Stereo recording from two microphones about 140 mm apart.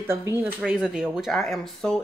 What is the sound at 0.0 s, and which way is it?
Speech, 20° right (ahead or behind).